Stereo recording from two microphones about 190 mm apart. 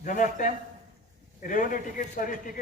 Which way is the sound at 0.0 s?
45° left (ahead or behind).